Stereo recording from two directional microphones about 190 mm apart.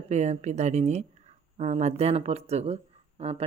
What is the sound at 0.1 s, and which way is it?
Speech, 35° right (ahead or behind).